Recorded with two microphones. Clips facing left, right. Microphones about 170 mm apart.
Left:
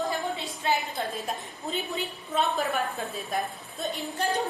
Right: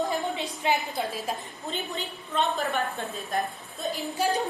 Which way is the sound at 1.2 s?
5° left (ahead or behind).